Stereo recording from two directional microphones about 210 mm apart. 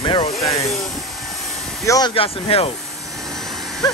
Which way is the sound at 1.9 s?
20° left (ahead or behind).